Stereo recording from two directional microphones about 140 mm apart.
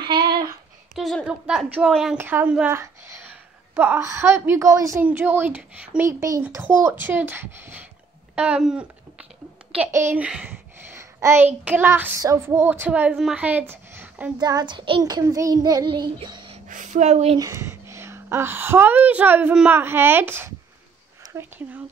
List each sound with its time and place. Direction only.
0.0 s a sound: 30° right (ahead or behind)
0.9 s a woman's voice: centre (ahead or behind)
2.1 s a woman's voice: 15° right (ahead or behind)
2.7 s a sound: 20° right (ahead or behind)
3.7 s a woman's voice: 15° right (ahead or behind)
6.0 s a woman's voice: 20° right (ahead or behind)
8.4 s a sound: 10° right (ahead or behind)
9.9 s a woman's voice: 15° right (ahead or behind)
11.0 s child singing: 20° right (ahead or behind)
14.4 s child singing: 30° right (ahead or behind)
16.5 s a sound: 65° right (ahead or behind); by 17.4 s 50° right (ahead or behind)
17.4 s a woman's voice: 20° right (ahead or behind)